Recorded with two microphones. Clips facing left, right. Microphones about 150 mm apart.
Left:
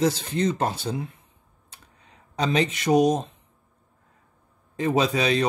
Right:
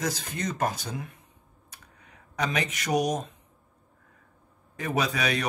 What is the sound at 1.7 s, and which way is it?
Computer keyboard, 30° left (ahead or behind).